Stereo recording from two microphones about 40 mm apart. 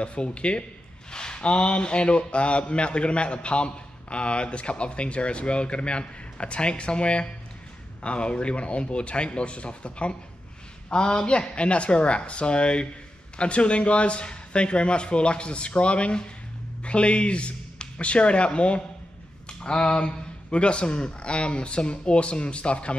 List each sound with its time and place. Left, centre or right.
0.0 s speech: left